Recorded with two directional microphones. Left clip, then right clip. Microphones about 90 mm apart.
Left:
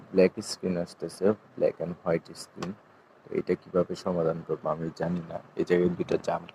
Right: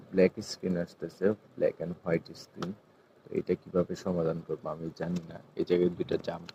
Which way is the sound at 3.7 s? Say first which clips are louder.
Left 3 dB; 30° left (ahead or behind).